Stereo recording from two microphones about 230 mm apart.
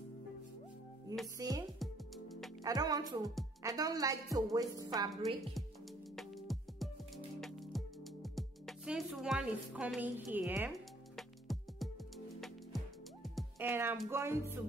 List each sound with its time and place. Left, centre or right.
1.4 s a woman's voice: centre
1.8 s music: centre
2.6 s a woman's voice: centre
6.1 s music: centre